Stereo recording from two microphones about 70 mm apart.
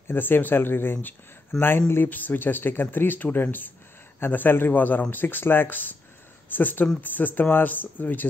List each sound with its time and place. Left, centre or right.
0.1 s speech: left
1.5 s speech: centre
1.9 s speech: left